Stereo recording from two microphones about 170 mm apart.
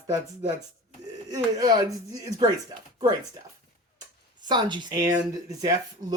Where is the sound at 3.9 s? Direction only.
25° right (ahead or behind).